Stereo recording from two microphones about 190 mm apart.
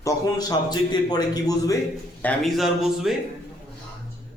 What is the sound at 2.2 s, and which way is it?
Speech, centre (ahead or behind).